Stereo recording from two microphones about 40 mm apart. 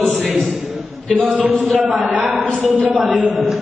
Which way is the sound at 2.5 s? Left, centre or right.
Right.